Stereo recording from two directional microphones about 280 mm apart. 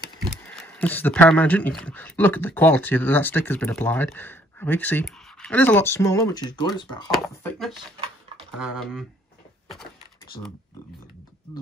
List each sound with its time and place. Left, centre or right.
0.5 s speech: centre
7.1 s speech: centre